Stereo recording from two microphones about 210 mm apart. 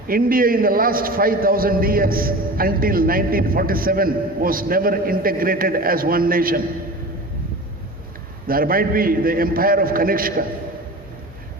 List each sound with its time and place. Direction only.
0.1 s a man's voice: 45° right (ahead or behind)
8.4 s a man's voice: 45° right (ahead or behind)